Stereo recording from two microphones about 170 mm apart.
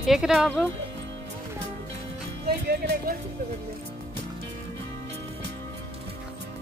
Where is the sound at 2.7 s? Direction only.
75° right (ahead or behind).